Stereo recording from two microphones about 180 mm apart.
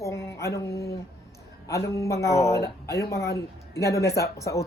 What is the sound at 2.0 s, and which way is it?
Speech, 15° left (ahead or behind).